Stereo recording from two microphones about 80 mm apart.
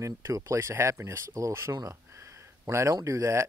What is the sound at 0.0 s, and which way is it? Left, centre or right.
Speech, right.